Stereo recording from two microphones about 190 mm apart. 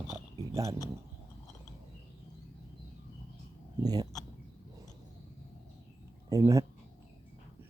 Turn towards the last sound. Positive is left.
turn(degrees=-20)  # may be behind; listen again after turning